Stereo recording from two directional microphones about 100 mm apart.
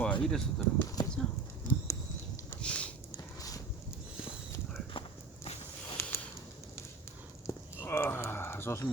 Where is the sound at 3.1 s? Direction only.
35° left (ahead or behind).